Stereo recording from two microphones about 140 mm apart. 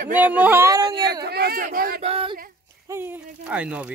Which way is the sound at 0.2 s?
15° right (ahead or behind).